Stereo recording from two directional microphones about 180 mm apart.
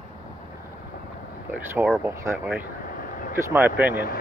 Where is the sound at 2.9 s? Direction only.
50° left (ahead or behind).